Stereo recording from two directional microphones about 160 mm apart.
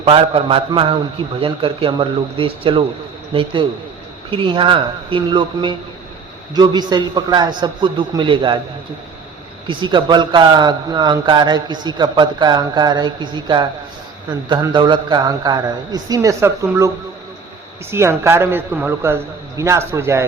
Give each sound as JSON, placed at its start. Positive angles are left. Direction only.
{"t": 0.0, "sound": "a man's voice", "side_deg": -35}
{"t": 9.6, "sound": "a man's voice", "side_deg": -30}
{"t": 14.7, "sound": "a man's voice", "side_deg": -30}
{"t": 17.9, "sound": "a man's voice", "side_deg": -15}